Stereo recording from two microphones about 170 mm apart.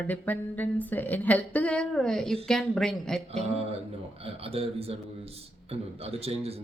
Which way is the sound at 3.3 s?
35° right (ahead or behind).